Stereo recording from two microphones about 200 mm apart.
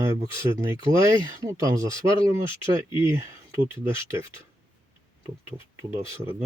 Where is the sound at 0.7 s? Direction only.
15° right (ahead or behind).